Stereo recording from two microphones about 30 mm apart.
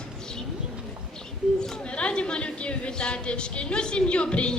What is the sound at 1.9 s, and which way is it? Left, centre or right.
A woman's voice, left.